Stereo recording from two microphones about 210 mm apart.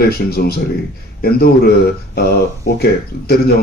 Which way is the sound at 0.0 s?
45° left (ahead or behind).